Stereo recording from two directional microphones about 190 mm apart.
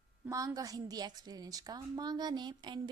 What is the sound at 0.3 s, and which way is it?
A woman's voice, 15° right (ahead or behind).